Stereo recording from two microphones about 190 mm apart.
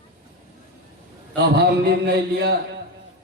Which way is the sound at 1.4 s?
55° right (ahead or behind).